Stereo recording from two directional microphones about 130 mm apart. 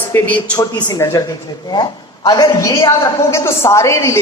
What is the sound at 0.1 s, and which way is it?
Speech, 10° left (ahead or behind).